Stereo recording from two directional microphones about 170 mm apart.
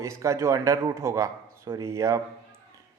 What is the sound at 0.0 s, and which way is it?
Speech, 15° right (ahead or behind).